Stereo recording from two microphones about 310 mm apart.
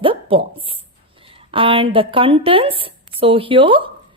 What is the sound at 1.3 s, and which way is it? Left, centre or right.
A woman's voice, centre.